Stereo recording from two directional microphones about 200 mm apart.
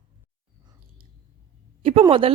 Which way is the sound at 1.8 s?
30° right (ahead or behind).